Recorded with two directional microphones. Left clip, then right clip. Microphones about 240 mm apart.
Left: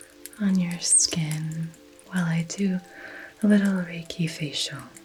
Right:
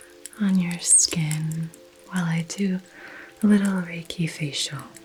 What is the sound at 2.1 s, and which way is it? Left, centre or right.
Speech, right.